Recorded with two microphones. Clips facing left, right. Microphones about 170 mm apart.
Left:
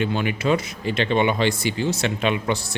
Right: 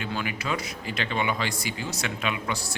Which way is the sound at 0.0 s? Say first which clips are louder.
Left 8 dB; 25° left (ahead or behind).